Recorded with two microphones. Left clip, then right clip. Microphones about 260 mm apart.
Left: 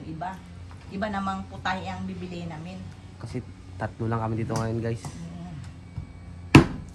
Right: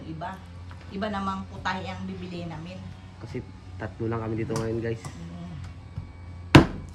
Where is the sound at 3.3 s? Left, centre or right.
Left.